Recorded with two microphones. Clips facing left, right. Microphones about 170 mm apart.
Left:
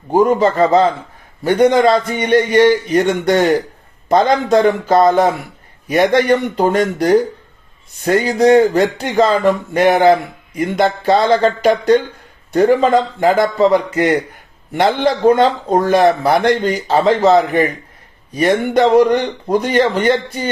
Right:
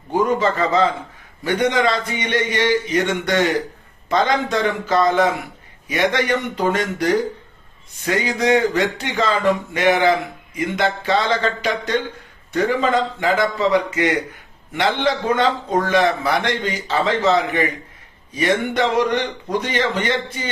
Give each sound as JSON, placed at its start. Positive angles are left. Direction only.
{"t": 0.1, "sound": "a man's voice", "side_deg": 45}